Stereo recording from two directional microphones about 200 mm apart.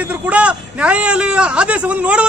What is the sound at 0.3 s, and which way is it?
A man's voice, 5° right (ahead or behind).